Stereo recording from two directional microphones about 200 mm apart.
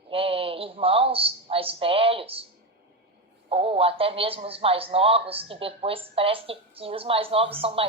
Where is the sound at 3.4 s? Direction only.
30° right (ahead or behind).